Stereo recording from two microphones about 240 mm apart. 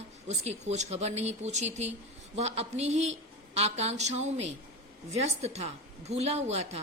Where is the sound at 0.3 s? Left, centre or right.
Right.